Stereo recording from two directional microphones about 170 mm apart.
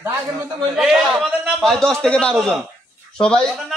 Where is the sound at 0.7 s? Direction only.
Centre (ahead or behind).